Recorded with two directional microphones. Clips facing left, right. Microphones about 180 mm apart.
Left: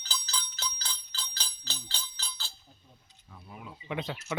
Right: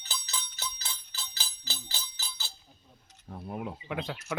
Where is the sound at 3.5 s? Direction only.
50° right (ahead or behind).